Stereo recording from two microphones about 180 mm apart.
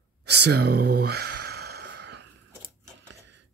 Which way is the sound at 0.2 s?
65° right (ahead or behind).